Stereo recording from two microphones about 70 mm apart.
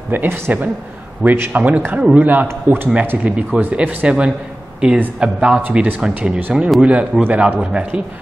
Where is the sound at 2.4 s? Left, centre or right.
Right.